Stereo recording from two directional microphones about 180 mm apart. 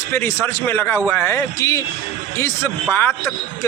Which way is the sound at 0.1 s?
15° left (ahead or behind).